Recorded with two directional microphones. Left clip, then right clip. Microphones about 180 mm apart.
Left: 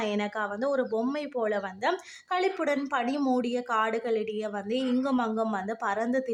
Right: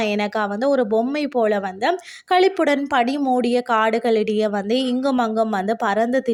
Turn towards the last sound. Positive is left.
turn(degrees=-30)  # may be behind; listen again after turning